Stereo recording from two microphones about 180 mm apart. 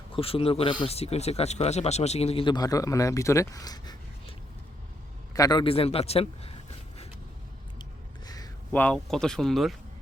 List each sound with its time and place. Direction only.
0.2 s speech: 30° left (ahead or behind)
8.7 s speech: 5° left (ahead or behind)